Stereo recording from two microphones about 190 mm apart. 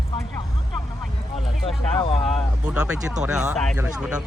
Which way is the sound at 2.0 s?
30° left (ahead or behind).